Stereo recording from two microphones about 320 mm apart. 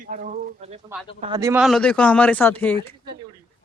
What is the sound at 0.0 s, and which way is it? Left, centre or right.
Speech, right.